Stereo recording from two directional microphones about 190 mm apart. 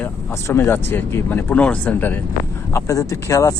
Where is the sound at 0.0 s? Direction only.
10° left (ahead or behind).